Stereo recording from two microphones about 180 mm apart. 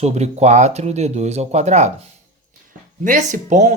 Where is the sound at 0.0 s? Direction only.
40° right (ahead or behind).